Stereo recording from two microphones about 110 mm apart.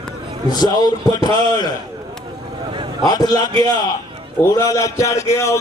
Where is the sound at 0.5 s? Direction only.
35° left (ahead or behind).